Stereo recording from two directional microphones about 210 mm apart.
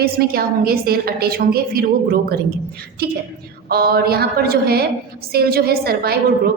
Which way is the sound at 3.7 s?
45° right (ahead or behind).